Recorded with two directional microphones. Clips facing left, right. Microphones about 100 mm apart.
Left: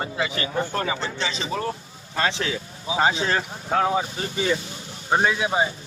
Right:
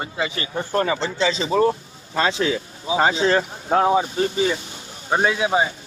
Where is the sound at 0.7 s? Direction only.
40° right (ahead or behind).